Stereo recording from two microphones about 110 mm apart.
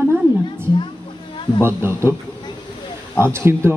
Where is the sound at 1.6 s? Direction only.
20° right (ahead or behind).